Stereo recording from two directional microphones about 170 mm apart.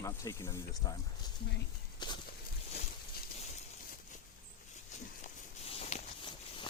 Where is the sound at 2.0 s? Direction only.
25° left (ahead or behind).